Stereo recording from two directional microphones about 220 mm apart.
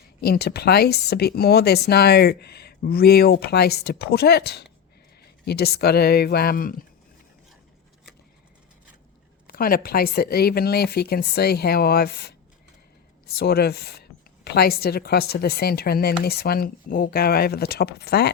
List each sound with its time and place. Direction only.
0.2 s speech: 45° left (ahead or behind)
9.5 s speech: 40° left (ahead or behind)